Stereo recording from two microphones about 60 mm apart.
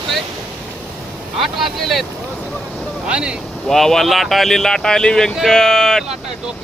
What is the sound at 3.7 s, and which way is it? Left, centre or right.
Speech, centre.